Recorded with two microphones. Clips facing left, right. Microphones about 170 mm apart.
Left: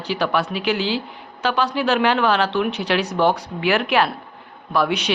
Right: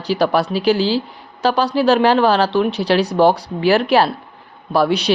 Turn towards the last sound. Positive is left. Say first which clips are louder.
# right 5 dB
turn(degrees=-35)  # may be behind; listen again after turning